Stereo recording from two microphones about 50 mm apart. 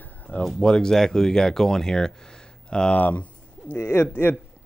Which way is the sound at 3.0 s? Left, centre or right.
Left.